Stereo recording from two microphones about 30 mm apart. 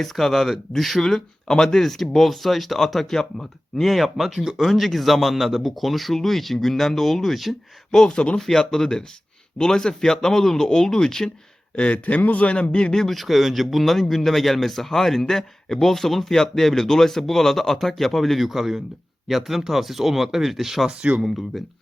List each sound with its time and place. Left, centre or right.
0.0 s a man's voice: centre
3.1 s a man's voice: centre
3.8 s a man's voice: centre
7.9 s speech: left
8.4 s a man's voice: centre
11.8 s a man's voice: left
12.7 s speech: left
13.1 s a man's voice: centre
18.4 s a man's voice: centre